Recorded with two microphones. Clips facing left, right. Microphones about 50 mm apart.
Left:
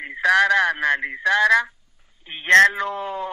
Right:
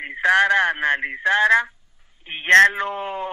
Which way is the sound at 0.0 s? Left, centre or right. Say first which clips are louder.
Even; right.